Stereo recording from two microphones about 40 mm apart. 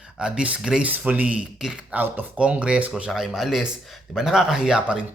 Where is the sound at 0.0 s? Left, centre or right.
Right.